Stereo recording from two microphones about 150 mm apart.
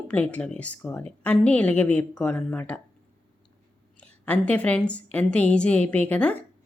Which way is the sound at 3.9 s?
10° left (ahead or behind).